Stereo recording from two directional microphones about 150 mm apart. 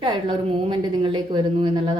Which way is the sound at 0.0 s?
35° right (ahead or behind).